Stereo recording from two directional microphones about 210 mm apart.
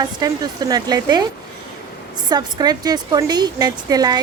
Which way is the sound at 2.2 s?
20° right (ahead or behind).